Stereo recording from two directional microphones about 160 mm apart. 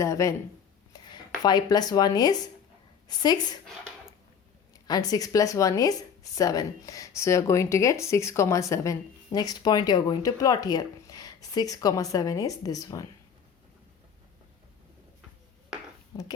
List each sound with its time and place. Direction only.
0.0 s speech: 20° left (ahead or behind)
1.4 s speech: 25° left (ahead or behind)
3.7 s a sound: centre (ahead or behind)
4.7 s speech: 25° left (ahead or behind)
16.1 s speech: 20° left (ahead or behind)